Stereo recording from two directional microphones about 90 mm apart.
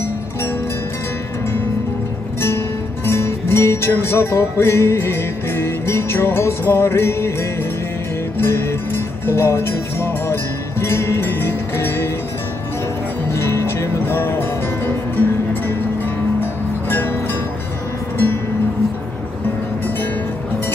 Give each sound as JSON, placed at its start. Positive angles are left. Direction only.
{"t": 3.1, "sound": "music", "side_deg": 25}
{"t": 8.4, "sound": "music", "side_deg": 25}
{"t": 13.3, "sound": "music", "side_deg": 30}